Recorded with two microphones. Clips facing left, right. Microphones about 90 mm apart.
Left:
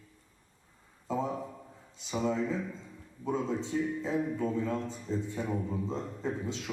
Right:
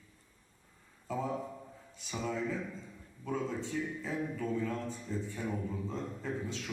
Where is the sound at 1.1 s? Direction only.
20° left (ahead or behind).